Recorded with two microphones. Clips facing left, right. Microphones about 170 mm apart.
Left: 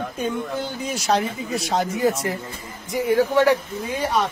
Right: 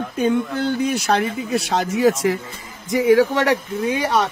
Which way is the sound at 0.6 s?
60° right (ahead or behind).